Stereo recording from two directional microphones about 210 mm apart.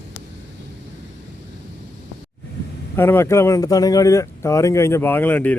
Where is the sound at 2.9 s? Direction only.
10° left (ahead or behind).